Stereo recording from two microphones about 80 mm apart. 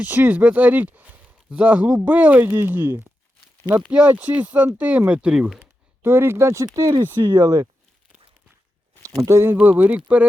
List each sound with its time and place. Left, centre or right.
0.0 s speech: right
3.7 s speech: centre
6.0 s speech: right
7.2 s speech: right
9.3 s speech: right